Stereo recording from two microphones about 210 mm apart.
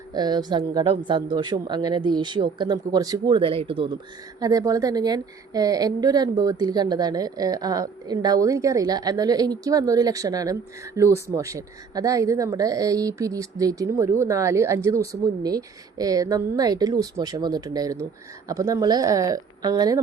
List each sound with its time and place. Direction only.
0.1 s a woman's voice: 20° right (ahead or behind)